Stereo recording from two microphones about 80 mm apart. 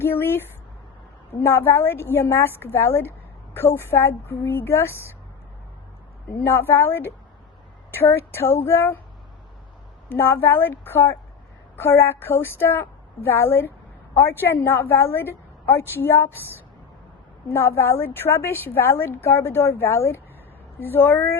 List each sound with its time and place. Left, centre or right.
0.0 s a woman's voice: left
6.4 s a woman's voice: left
10.1 s a woman's voice: left
17.5 s a woman's voice: left